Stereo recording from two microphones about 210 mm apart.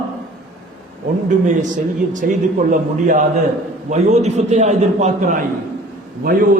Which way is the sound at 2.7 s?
40° right (ahead or behind).